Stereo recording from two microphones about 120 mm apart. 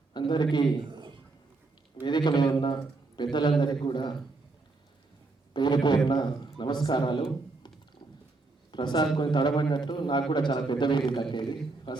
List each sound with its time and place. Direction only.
0.1 s a man's voice: 40° left (ahead or behind)
0.9 s a sound: 40° right (ahead or behind)
2.0 s a man's voice: 40° left (ahead or behind)
5.5 s a man's voice: 40° left (ahead or behind)
8.7 s a man's voice: 40° left (ahead or behind)